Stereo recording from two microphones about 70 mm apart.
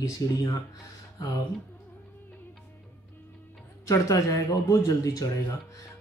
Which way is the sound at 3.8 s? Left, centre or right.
Left.